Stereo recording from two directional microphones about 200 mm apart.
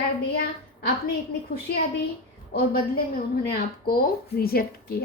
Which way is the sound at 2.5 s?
50° left (ahead or behind).